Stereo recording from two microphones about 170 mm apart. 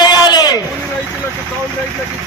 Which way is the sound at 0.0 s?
25° left (ahead or behind).